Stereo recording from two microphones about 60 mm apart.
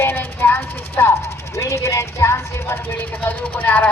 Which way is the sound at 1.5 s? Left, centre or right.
Left.